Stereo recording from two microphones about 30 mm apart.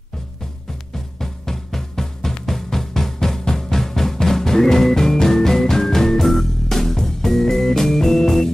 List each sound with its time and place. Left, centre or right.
0.9 s drum: centre
6.2 s music: centre